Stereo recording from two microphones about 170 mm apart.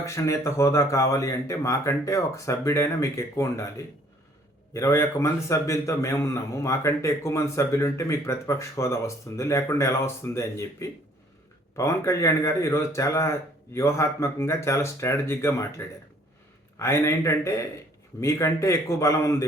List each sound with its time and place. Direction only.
0.0 s a man's voice: 15° left (ahead or behind)
16.7 s a man's voice: 15° left (ahead or behind)